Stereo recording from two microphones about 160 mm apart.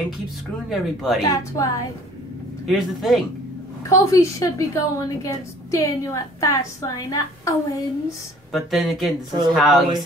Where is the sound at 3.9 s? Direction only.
20° left (ahead or behind).